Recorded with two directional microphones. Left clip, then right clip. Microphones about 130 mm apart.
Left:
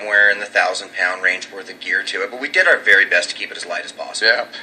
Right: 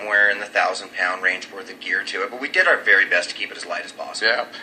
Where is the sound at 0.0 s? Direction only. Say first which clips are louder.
Left 4 dB; 25° left (ahead or behind).